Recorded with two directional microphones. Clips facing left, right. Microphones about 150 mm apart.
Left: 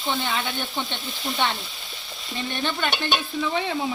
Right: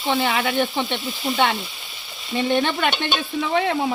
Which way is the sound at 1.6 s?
Centre (ahead or behind).